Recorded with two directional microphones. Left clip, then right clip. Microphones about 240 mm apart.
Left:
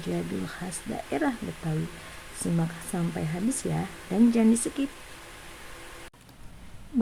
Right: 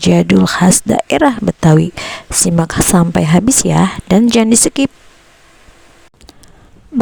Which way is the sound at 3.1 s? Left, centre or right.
Right.